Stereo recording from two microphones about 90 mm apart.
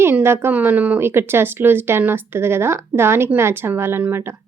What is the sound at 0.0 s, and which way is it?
Speech, 25° right (ahead or behind).